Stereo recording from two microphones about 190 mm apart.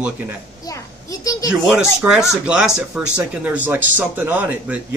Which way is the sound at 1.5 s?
5° right (ahead or behind).